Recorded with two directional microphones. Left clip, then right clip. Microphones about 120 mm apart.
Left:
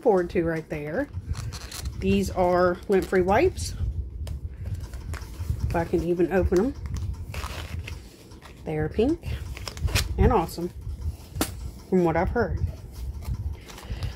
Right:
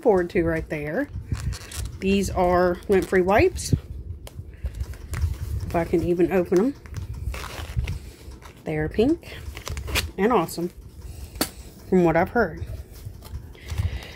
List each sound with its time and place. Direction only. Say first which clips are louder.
0.0 s speech: right 2 dB; 45° right (ahead or behind)
1.3 s scissors: right 1 dB; 10° right (ahead or behind)
2.0 s speech: right 2 dB; 45° right (ahead or behind)
5.8 s speech: right 3 dB; 45° right (ahead or behind)
7.3 s a sound: right 1 dB; 30° right (ahead or behind)
8.6 s shuffling cards: right 3 dB; 45° right (ahead or behind)
10.1 s speech: right 2 dB; 50° right (ahead or behind)
11.9 s speech: right 4 dB; 60° right (ahead or behind)